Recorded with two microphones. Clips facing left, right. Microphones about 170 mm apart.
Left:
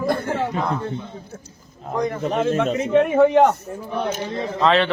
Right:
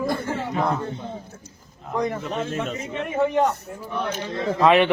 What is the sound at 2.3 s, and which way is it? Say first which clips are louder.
A man's voice: left 7 dB; 65° left (ahead or behind).